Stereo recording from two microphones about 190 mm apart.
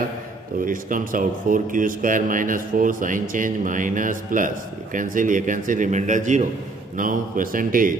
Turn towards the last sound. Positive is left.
turn(degrees=-45)  # may be behind; listen again after turning